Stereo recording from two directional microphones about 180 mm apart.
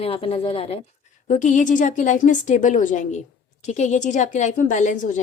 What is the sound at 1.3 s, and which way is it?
A woman's voice, 45° left (ahead or behind).